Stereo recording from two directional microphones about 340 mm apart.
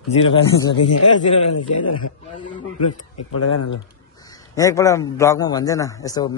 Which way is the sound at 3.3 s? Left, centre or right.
Left.